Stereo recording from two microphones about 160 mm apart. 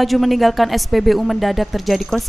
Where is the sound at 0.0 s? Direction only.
Centre (ahead or behind).